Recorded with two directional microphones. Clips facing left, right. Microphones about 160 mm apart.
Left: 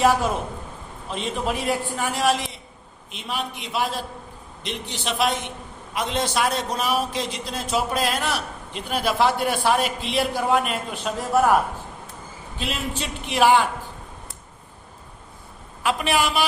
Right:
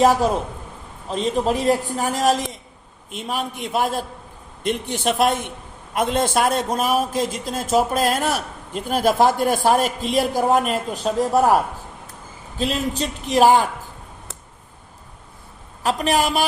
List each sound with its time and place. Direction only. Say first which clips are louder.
1.1 s a man's voice: right 6 dB; 35° right (ahead or behind)
12.5 s a man's voice: right 6 dB; 40° right (ahead or behind)
15.8 s a man's voice: right 3 dB; 40° right (ahead or behind)